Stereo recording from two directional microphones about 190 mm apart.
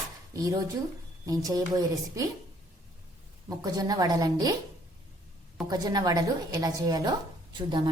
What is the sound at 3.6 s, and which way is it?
Speech, 20° right (ahead or behind).